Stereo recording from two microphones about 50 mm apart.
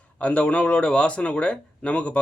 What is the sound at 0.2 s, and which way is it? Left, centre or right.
Speech, left.